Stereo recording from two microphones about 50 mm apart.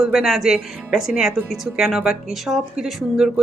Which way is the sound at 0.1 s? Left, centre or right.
Centre.